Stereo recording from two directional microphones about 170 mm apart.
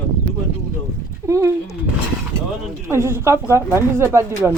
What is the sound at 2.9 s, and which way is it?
Speech, 15° right (ahead or behind).